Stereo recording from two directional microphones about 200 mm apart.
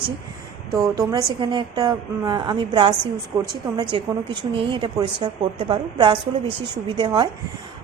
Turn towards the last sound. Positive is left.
turn(degrees=-20)  # may be behind; listen again after turning